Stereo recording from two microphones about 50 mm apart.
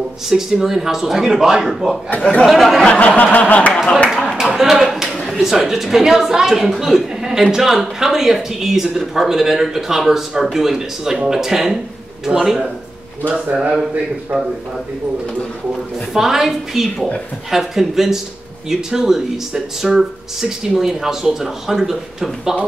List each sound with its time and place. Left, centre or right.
0.3 s speech: centre
2.9 s snicker: left
4.1 s clapping: centre
4.4 s a sound: centre
5.1 s a sound: centre
5.4 s speech: centre
14.3 s snicker: left
16.1 s speech: centre